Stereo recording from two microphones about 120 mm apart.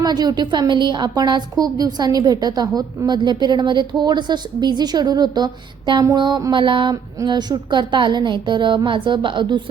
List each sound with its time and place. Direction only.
0.0 s a woman's voice: 35° right (ahead or behind)
6.9 s a woman's voice: 35° right (ahead or behind)